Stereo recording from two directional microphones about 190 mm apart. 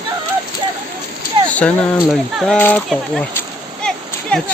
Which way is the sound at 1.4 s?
5° left (ahead or behind).